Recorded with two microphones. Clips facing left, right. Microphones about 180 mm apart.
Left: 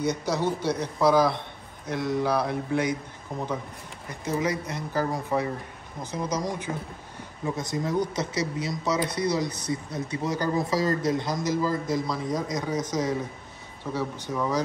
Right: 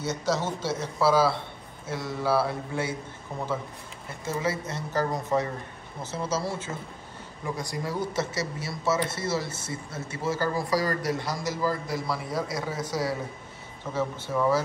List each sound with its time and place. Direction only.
0.0 s speech: 15° left (ahead or behind)
4.1 s speech: 15° left (ahead or behind)